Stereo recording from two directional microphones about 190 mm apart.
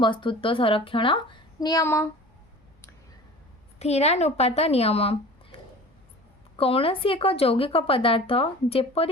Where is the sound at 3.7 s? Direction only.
35° left (ahead or behind).